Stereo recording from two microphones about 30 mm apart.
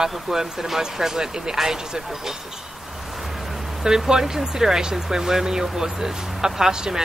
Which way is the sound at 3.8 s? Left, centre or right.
Right.